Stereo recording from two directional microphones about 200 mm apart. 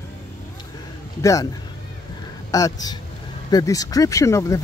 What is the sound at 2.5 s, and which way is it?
Speech, 15° left (ahead or behind).